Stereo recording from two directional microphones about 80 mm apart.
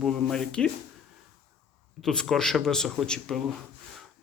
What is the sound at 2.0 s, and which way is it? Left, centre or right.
A man's voice, centre.